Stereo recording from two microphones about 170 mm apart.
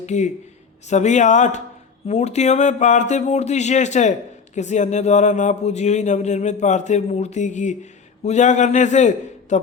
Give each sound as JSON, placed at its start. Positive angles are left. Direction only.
{"t": 0.0, "sound": "speech", "side_deg": 45}